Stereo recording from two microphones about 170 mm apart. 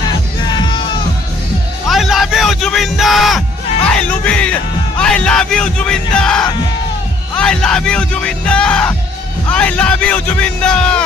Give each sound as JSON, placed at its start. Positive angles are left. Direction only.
{"t": 0.5, "sound": "music", "side_deg": 25}
{"t": 1.9, "sound": "a sound", "side_deg": 0}
{"t": 3.9, "sound": "music", "side_deg": 5}
{"t": 7.3, "sound": "a man's voice", "side_deg": 5}